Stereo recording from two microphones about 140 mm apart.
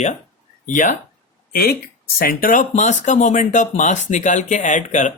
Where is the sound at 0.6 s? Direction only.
70° left (ahead or behind).